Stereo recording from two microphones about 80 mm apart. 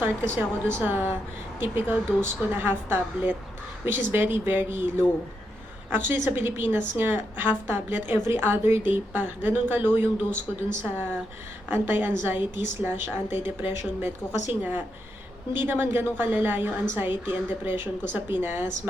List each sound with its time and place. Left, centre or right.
0.0 s a woman's voice: right